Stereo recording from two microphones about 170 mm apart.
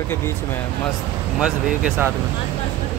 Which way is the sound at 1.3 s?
5° right (ahead or behind).